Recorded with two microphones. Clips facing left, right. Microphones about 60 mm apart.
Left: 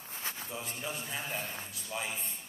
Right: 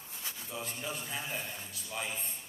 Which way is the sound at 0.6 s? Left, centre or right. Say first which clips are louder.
Right 3 dB; centre.